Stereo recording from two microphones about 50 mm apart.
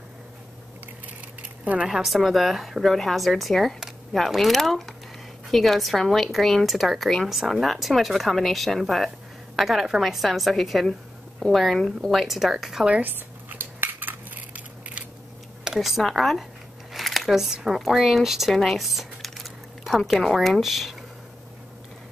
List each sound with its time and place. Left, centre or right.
1.4 s a sound: right
1.9 s a woman's voice: centre
13.0 s cutlery: right
15.6 s a woman's voice: centre